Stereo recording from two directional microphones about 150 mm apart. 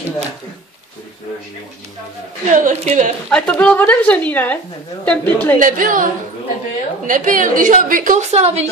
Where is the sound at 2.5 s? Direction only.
55° right (ahead or behind).